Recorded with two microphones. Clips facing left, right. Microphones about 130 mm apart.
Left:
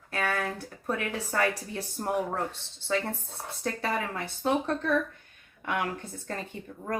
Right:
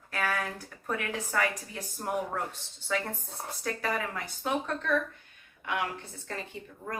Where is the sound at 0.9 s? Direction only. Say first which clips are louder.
Left 2 dB; 35° left (ahead or behind).